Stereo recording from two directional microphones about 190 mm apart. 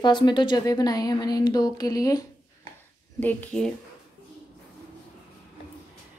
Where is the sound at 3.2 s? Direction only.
5° left (ahead or behind).